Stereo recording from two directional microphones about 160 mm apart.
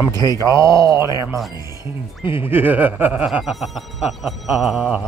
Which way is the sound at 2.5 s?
10° right (ahead or behind).